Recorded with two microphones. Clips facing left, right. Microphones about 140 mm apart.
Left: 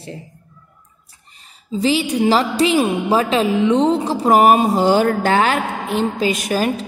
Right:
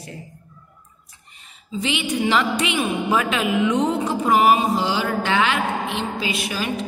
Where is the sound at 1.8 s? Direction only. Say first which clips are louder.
Left 6 dB; 35° left (ahead or behind).